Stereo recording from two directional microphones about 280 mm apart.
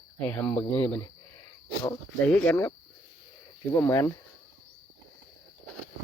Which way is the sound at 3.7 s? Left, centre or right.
Centre.